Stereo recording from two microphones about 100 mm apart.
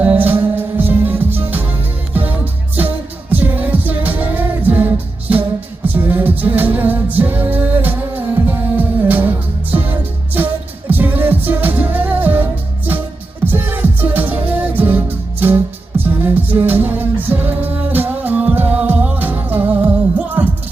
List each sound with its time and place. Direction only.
0.0 s music: 15° right (ahead or behind)